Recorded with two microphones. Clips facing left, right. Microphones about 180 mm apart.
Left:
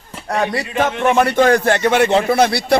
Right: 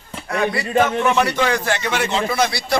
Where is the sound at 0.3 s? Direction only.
40° left (ahead or behind).